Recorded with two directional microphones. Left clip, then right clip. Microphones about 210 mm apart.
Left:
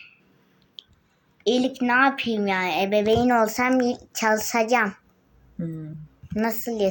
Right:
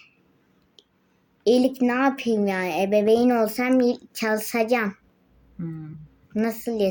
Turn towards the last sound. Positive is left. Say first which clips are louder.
# even
turn(degrees=-15)  # may be behind; listen again after turning